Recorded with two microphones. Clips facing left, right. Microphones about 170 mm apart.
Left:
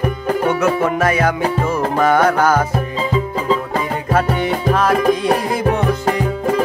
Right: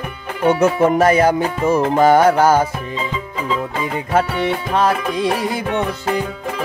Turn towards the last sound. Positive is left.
turn(degrees=40)  # may be behind; listen again after turning